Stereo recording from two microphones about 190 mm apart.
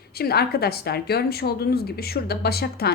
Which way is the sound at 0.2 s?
55° left (ahead or behind).